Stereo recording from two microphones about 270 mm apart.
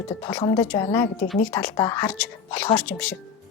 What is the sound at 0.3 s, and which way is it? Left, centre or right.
Speech, centre.